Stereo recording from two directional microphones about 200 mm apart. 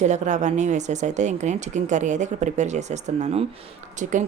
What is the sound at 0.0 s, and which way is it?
Speech, 35° right (ahead or behind).